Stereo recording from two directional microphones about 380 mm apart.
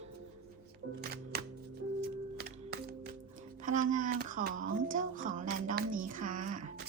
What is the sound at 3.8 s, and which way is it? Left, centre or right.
Speech, centre.